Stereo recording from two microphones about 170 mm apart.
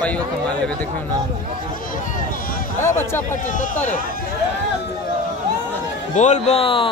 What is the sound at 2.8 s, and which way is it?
Speech, 15° left (ahead or behind).